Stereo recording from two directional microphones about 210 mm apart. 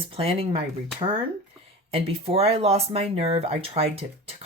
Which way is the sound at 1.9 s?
25° right (ahead or behind).